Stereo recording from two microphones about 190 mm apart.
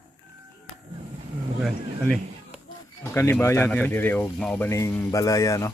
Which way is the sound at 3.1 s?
15° left (ahead or behind).